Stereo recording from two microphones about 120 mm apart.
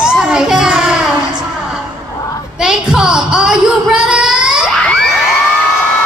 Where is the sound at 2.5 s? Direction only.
5° right (ahead or behind).